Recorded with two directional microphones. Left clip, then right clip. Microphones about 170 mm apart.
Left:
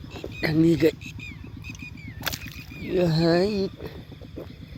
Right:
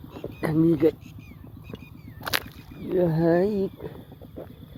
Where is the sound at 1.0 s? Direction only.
35° right (ahead or behind).